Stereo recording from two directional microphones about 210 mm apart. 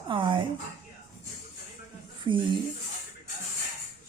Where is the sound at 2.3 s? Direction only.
25° right (ahead or behind).